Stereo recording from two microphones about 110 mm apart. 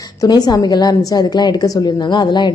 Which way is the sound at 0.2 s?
35° left (ahead or behind).